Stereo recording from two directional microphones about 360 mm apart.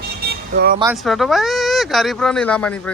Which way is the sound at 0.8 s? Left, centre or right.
Centre.